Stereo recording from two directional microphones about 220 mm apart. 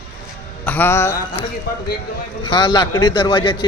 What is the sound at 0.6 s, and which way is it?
Mantra, 10° left (ahead or behind).